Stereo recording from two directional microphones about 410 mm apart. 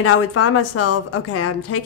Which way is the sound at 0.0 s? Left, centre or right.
Left.